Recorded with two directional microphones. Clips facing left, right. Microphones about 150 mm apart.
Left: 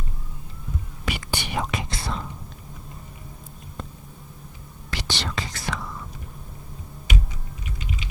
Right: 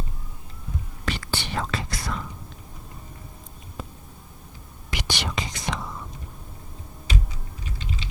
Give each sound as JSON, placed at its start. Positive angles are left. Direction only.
{"t": 1.0, "sound": "whispering", "side_deg": 15}
{"t": 2.0, "sound": "whispering", "side_deg": 30}
{"t": 3.8, "sound": "a sound", "side_deg": -5}
{"t": 4.9, "sound": "whispering", "side_deg": -15}